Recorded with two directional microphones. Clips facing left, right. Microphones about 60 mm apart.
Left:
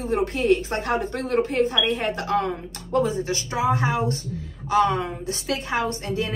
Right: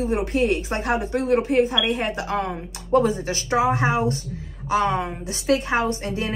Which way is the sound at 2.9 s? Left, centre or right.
Right.